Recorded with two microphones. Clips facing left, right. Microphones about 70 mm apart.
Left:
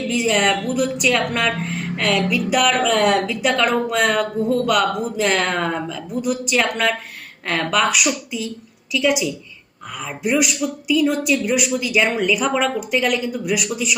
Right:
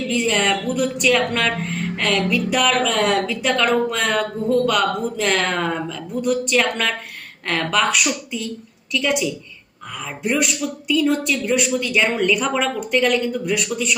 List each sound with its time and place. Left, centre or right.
0.1 s speech: centre